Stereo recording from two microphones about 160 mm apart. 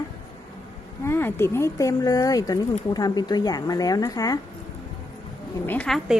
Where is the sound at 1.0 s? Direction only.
15° left (ahead or behind).